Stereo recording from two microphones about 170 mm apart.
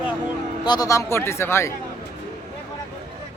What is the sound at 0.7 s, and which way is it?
Speech, 20° left (ahead or behind).